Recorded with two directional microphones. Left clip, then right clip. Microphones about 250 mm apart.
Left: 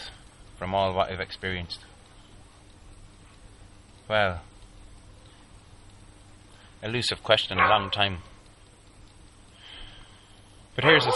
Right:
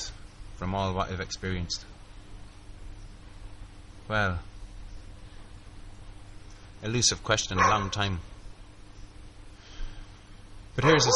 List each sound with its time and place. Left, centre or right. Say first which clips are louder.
0.6 s a man's voice: left 6 dB; centre
4.1 s a man's voice: left 4 dB; centre
6.8 s a man's voice: right 1 dB; centre
10.8 s a man's voice: left 3 dB; centre